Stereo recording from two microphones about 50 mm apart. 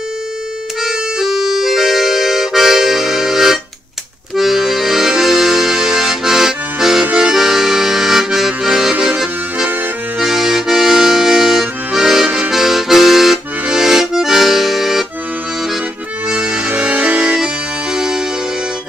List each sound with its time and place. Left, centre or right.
0.8 s accordion: centre
16.3 s accordion: right
17.9 s music: centre